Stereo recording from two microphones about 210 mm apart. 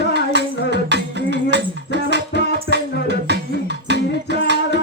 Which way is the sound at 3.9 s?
55° right (ahead or behind).